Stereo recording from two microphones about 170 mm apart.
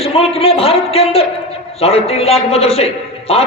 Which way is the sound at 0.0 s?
35° left (ahead or behind).